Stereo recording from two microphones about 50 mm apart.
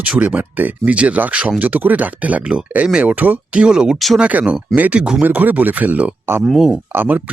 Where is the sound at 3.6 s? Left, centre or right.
Centre.